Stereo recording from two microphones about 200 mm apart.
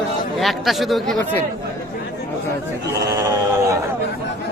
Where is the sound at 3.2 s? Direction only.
15° right (ahead or behind).